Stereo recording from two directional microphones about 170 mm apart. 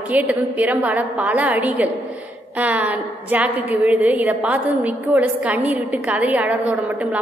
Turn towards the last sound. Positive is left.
turn(degrees=-10)  # may be behind; listen again after turning